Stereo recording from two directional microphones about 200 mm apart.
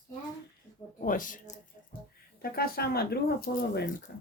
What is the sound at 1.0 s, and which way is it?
Speech, 40° left (ahead or behind).